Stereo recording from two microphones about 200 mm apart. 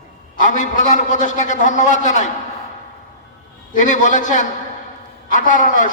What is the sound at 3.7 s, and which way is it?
A man's voice, 40° left (ahead or behind).